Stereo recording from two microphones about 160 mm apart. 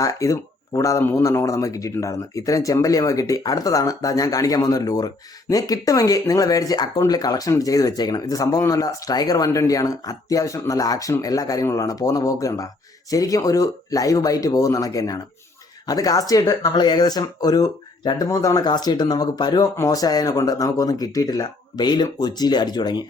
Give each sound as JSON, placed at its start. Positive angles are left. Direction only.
{"t": 0.0, "sound": "speech", "side_deg": 20}